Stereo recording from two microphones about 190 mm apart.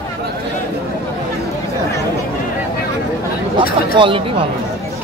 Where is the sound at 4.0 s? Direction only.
25° right (ahead or behind).